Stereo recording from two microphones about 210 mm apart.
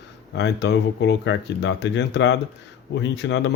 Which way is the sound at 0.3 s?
55° left (ahead or behind).